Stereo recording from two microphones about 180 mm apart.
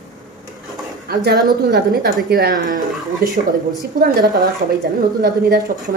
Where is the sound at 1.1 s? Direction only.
60° right (ahead or behind).